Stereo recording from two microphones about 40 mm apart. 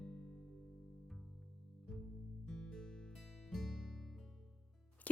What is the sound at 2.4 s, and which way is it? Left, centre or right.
Music, centre.